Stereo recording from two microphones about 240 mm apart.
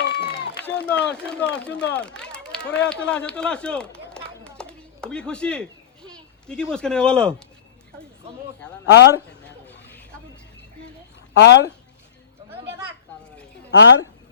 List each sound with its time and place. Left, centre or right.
0.0 s run: left
1.1 s speech: centre
8.9 s speech: left
11.3 s speech: left
13.7 s a woman's voice: left